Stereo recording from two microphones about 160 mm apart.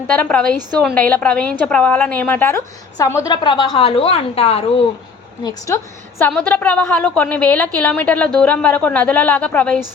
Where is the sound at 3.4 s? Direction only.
30° left (ahead or behind).